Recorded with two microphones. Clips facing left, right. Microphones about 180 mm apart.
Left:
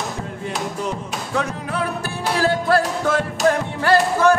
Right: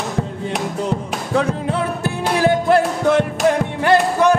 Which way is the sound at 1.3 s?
30° right (ahead or behind).